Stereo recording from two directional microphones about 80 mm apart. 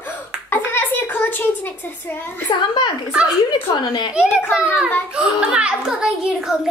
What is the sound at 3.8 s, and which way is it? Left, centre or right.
Speech, left.